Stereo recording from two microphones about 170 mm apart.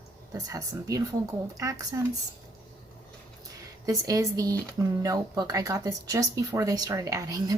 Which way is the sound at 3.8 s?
20° right (ahead or behind).